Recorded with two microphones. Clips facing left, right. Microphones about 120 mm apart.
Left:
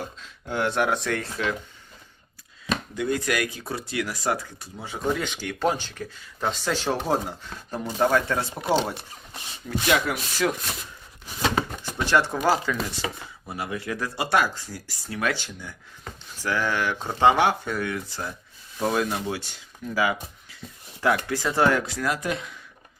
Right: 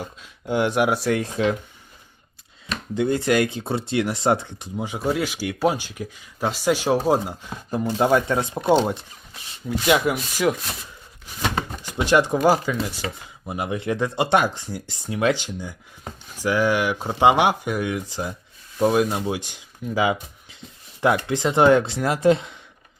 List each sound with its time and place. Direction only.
0.2 s speech: 15° right (ahead or behind)
2.9 s speech: 30° right (ahead or behind)
11.8 s speech: 15° right (ahead or behind)